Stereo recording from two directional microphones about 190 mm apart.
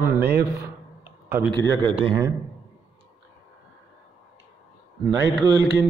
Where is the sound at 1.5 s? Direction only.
25° right (ahead or behind).